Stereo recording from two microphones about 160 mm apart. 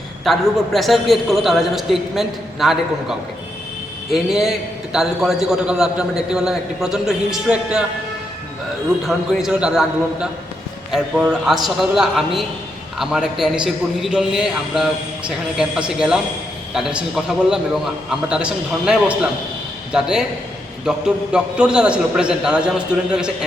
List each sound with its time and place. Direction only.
0.3 s a man's voice: centre (ahead or behind)
9.0 s a man's voice: 5° right (ahead or behind)
16.0 s a man's voice: 5° right (ahead or behind)